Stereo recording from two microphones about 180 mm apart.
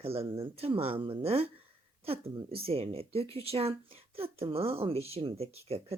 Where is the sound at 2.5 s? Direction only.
30° right (ahead or behind).